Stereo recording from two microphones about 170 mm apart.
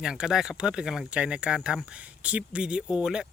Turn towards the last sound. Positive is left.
turn(degrees=-5)  # may be behind; listen again after turning